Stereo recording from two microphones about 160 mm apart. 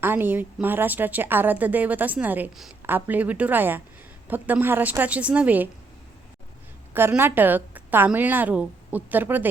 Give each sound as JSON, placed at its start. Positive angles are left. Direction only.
{"t": 0.0, "sound": "a woman's voice", "side_deg": -15}
{"t": 6.9, "sound": "a woman's voice", "side_deg": -15}